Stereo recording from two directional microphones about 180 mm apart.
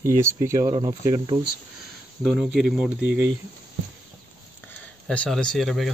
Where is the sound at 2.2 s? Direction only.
Centre (ahead or behind).